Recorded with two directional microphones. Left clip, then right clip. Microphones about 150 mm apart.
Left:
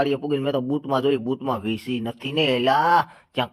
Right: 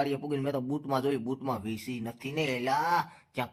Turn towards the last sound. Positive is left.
turn(degrees=30)  # may be behind; listen again after turning